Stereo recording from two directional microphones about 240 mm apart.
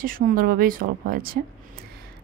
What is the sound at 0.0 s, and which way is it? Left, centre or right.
Speech, right.